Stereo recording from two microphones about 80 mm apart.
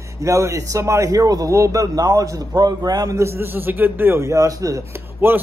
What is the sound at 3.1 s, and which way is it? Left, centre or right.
A man's voice, right.